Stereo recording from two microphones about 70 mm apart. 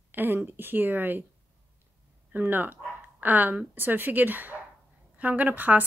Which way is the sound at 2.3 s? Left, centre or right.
Right.